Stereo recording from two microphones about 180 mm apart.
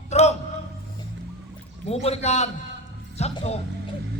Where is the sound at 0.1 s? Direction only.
40° left (ahead or behind).